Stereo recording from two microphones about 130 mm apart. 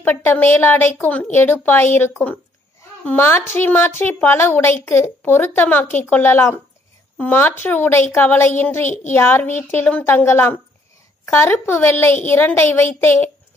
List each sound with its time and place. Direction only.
0.0 s speech: 15° left (ahead or behind)
8.8 s a woman's voice: 70° left (ahead or behind)
9.1 s speech: 15° left (ahead or behind)